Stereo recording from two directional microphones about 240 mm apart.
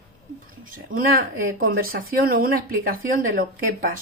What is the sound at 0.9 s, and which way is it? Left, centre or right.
Speech, right.